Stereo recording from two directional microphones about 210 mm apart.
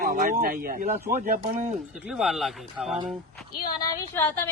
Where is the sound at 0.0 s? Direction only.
40° right (ahead or behind).